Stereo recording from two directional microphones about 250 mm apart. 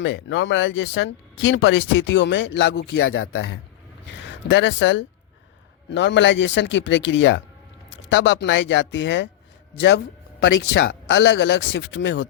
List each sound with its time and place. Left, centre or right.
0.0 s speech: left